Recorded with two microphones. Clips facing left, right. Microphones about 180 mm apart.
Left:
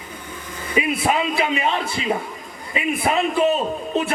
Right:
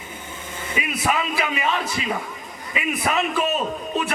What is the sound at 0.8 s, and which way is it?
A man's voice, 25° left (ahead or behind).